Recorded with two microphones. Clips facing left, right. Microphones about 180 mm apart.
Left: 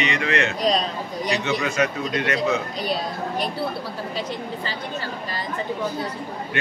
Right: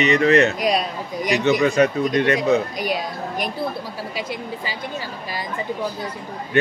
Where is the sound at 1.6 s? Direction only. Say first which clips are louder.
Right 6 dB; 35° right (ahead or behind).